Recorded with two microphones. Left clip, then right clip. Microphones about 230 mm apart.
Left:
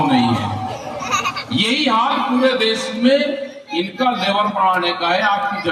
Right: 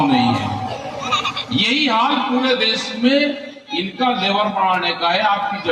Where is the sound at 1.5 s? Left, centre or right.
Left.